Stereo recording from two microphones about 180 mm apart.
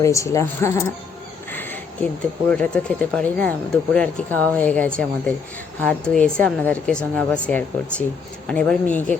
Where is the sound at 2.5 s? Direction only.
5° left (ahead or behind).